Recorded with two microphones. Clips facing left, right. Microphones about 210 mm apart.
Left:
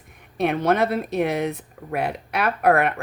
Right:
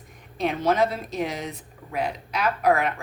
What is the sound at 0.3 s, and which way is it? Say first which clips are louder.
Speech: left 2 dB; 60° left (ahead or behind).